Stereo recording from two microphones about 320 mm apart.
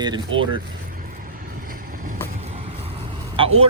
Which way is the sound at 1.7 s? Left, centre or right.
Right.